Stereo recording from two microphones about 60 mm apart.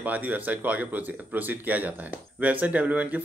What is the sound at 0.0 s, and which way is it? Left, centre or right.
Speech, right.